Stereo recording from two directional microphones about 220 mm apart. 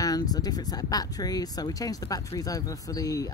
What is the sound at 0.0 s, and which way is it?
Speech, 15° left (ahead or behind).